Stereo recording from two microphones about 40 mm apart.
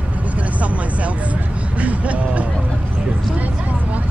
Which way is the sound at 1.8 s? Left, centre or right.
Right.